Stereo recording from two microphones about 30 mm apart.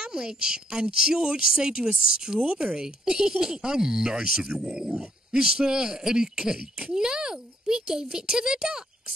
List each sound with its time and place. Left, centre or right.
0.0 s a woman's voice: right
2.4 s speech: right